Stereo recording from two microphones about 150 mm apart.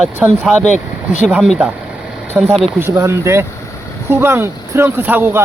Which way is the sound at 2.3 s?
15° right (ahead or behind).